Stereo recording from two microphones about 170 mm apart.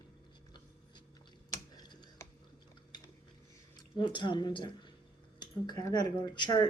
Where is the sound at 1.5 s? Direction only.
25° left (ahead or behind).